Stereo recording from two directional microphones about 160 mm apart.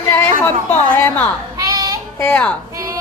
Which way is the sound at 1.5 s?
20° right (ahead or behind).